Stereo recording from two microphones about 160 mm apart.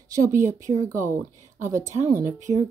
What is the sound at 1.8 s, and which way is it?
Speech, 50° right (ahead or behind).